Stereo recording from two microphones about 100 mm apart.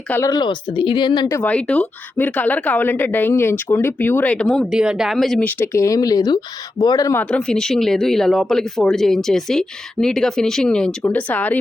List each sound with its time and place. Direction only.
0.2 s speech: 45° left (ahead or behind)
1.4 s a woman's voice: 15° left (ahead or behind)
4.7 s speech: 5° right (ahead or behind)
5.5 s speech: 25° left (ahead or behind)
7.3 s speech: 10° left (ahead or behind)